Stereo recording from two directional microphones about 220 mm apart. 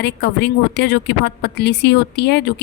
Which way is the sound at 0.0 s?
50° left (ahead or behind).